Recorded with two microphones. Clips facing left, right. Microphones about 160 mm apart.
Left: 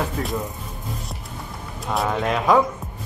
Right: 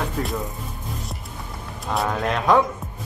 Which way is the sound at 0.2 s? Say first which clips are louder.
Even; centre (ahead or behind).